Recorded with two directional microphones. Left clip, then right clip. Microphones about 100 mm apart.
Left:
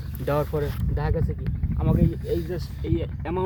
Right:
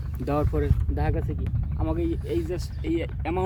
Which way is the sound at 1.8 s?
15° right (ahead or behind).